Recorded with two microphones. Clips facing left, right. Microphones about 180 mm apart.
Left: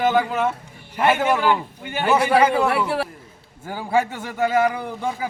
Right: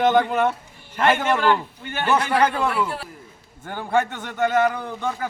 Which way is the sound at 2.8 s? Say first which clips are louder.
Left 7 dB; 70° left (ahead or behind).